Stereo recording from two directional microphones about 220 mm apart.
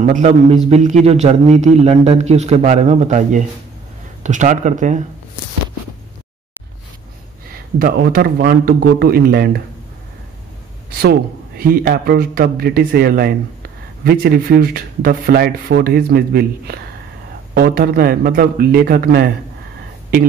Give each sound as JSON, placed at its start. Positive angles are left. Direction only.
{"t": 0.0, "sound": "a man's voice", "side_deg": -35}
{"t": 7.5, "sound": "speech", "side_deg": -45}
{"t": 10.9, "sound": "speech", "side_deg": -45}